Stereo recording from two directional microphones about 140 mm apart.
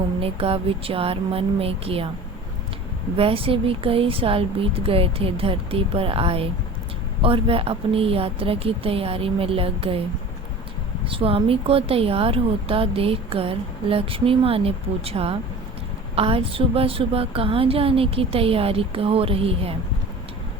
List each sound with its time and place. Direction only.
0.2 s a woman's voice: 45° right (ahead or behind)
3.2 s speech: 40° right (ahead or behind)
11.0 s a woman's voice: 40° right (ahead or behind)